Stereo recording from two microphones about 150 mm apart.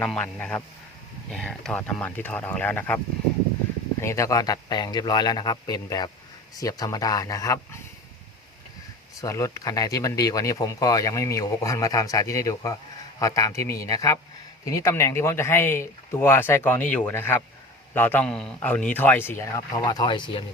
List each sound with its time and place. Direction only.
0.0 s a man's voice: 5° left (ahead or behind)
4.0 s speech: 20° left (ahead or behind)
9.2 s a man's voice: 20° left (ahead or behind)